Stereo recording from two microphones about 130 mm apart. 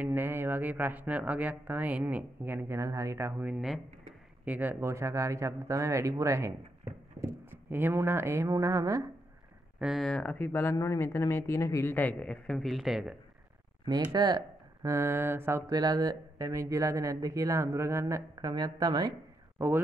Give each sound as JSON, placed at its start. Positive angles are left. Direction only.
{"t": 0.0, "sound": "speech", "side_deg": -15}
{"t": 9.8, "sound": "speech", "side_deg": 0}
{"t": 13.8, "sound": "speech", "side_deg": -30}